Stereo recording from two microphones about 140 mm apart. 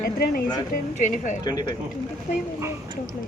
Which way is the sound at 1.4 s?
30° left (ahead or behind).